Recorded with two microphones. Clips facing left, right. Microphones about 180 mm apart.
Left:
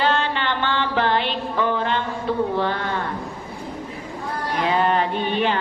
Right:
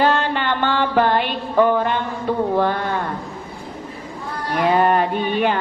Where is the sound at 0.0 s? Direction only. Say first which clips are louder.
Right 3 dB; 50° right (ahead or behind).